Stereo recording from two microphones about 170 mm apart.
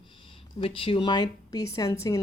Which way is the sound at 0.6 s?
30° left (ahead or behind).